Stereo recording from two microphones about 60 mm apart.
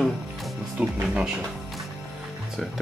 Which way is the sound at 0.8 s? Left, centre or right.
Right.